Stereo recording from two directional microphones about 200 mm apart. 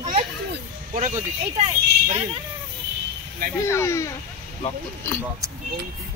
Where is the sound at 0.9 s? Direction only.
35° right (ahead or behind).